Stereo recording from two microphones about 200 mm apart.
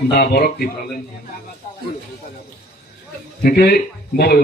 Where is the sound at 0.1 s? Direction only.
50° left (ahead or behind).